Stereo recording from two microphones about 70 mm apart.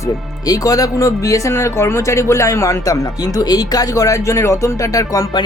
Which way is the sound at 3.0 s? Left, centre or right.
Left.